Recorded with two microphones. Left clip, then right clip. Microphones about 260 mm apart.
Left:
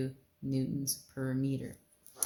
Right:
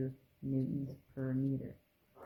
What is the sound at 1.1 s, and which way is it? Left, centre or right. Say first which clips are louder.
Speech: left 1 dB; left.